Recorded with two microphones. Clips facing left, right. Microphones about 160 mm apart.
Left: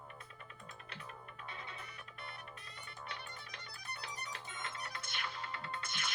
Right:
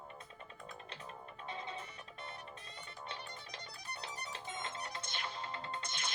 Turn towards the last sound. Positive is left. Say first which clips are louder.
# right 1 dB
turn(degrees=-30)  # may be behind; listen again after turning